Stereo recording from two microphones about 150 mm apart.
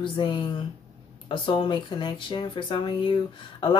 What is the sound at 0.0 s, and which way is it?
Speech, 35° left (ahead or behind).